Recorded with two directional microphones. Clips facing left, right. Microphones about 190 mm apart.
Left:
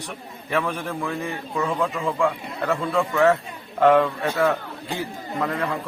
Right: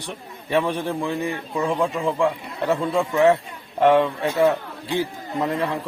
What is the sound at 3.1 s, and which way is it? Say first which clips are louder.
A man's voice: right 2 dB; 20° right (ahead or behind).